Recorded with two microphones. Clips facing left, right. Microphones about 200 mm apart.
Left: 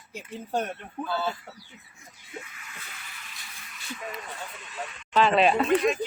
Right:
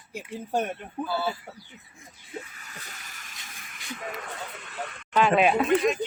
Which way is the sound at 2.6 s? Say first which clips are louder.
Right 1 dB; 40° right (ahead or behind).